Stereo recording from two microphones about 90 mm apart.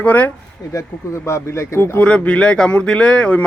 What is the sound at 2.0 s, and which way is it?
Speech, 15° left (ahead or behind).